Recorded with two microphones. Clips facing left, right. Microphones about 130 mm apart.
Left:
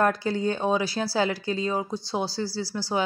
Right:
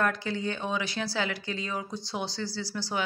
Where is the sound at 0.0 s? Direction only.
35° left (ahead or behind).